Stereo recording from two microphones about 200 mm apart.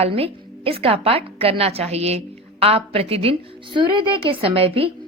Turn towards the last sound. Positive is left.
turn(degrees=-30)  # may be behind; listen again after turning